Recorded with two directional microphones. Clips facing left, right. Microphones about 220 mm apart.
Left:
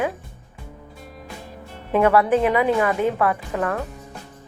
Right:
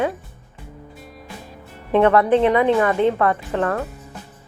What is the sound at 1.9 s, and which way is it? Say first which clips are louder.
A woman's voice: right 2 dB; 10° left (ahead or behind).